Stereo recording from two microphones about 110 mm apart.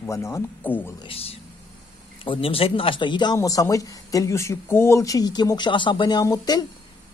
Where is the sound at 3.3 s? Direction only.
30° left (ahead or behind).